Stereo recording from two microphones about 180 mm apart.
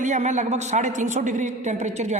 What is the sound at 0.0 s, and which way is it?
A woman's voice, 40° right (ahead or behind).